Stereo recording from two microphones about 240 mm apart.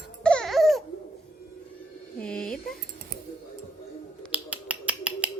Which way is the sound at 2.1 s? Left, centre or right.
Centre.